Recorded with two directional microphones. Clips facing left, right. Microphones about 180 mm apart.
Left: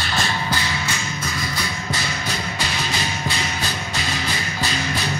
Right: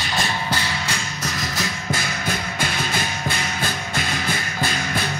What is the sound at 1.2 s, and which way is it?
Music, 40° right (ahead or behind).